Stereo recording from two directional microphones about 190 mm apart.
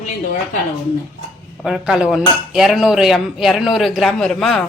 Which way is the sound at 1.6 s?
Centre (ahead or behind).